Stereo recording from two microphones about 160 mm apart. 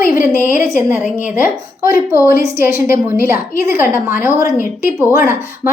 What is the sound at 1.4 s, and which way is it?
Speech, 60° left (ahead or behind).